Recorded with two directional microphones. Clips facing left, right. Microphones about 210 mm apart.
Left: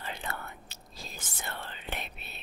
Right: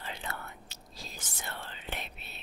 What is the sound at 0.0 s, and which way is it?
Whispering, 55° left (ahead or behind).